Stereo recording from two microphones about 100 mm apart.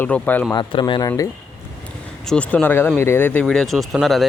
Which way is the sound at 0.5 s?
50° left (ahead or behind).